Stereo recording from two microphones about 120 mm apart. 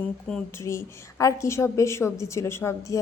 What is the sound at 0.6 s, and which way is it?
Speech, 25° left (ahead or behind).